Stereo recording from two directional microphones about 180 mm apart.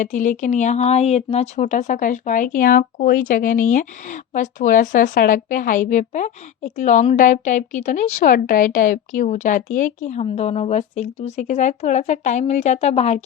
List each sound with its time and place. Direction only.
0.0 s speech: 45° left (ahead or behind)